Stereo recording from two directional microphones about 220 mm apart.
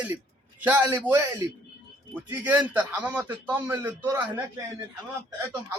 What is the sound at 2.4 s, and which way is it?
A man's voice, 5° right (ahead or behind).